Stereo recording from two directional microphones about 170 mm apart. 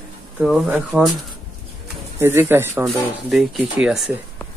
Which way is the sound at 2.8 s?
Centre (ahead or behind).